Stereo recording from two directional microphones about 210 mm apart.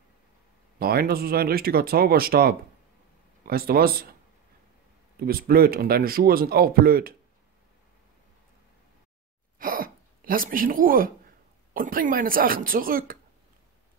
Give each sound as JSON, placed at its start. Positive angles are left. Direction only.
{"t": 0.7, "sound": "speech", "side_deg": -45}
{"t": 5.2, "sound": "speech", "side_deg": -45}
{"t": 9.6, "sound": "a sound", "side_deg": -40}
{"t": 11.7, "sound": "speech", "side_deg": -40}